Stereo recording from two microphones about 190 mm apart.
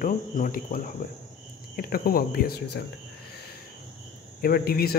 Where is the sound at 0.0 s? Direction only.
45° left (ahead or behind).